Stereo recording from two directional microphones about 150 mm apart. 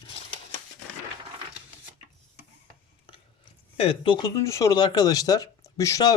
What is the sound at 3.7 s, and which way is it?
Speech, 35° left (ahead or behind).